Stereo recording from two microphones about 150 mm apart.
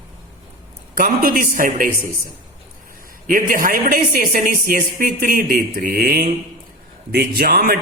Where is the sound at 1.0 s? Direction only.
65° right (ahead or behind).